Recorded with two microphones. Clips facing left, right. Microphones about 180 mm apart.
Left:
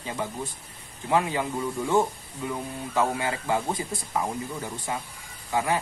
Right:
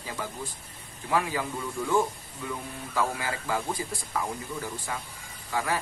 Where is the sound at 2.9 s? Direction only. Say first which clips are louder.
Left 4 dB; 25° left (ahead or behind).